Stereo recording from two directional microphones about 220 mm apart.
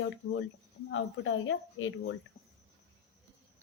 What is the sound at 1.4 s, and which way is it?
Speech, 60° left (ahead or behind).